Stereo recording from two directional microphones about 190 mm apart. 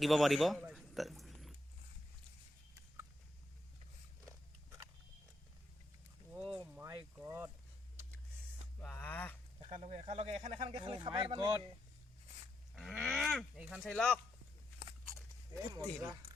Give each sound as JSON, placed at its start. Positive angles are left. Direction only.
{"t": 0.0, "sound": "speech", "side_deg": 0}
{"t": 6.8, "sound": "speech", "side_deg": -15}
{"t": 8.8, "sound": "a sound", "side_deg": 10}
{"t": 9.6, "sound": "speech", "side_deg": -35}
{"t": 12.7, "sound": "speech", "side_deg": 0}
{"t": 15.7, "sound": "speech", "side_deg": -20}